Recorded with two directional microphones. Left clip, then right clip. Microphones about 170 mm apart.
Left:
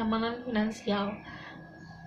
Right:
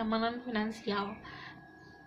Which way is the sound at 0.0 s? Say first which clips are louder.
Left 2 dB; 40° right (ahead or behind).